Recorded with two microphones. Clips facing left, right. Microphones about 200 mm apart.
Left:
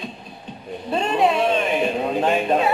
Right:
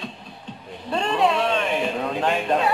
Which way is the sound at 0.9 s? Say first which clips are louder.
Left 2 dB; 15° left (ahead or behind).